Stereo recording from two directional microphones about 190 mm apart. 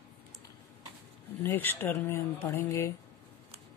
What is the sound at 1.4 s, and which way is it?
Speech, 10° left (ahead or behind).